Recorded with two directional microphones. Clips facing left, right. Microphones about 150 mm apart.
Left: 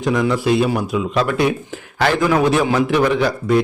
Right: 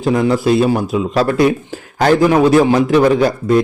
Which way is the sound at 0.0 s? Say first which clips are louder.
Right 4 dB; 35° right (ahead or behind).